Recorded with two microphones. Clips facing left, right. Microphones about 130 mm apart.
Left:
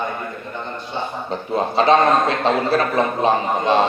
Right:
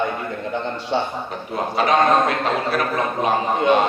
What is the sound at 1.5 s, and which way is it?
A man's voice, 30° left (ahead or behind).